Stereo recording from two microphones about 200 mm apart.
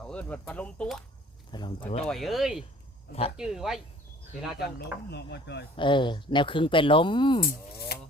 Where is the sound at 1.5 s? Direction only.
25° left (ahead or behind).